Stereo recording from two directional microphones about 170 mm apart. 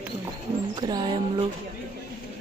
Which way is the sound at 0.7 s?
25° right (ahead or behind).